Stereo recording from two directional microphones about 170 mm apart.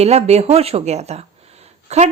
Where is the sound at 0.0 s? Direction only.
40° right (ahead or behind).